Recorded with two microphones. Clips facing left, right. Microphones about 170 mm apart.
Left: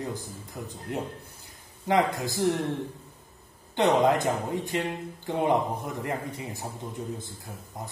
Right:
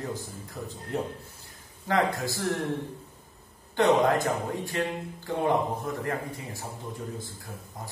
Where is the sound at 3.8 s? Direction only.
20° left (ahead or behind).